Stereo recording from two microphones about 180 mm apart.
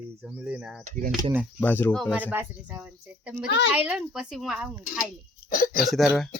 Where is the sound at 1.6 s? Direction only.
10° left (ahead or behind).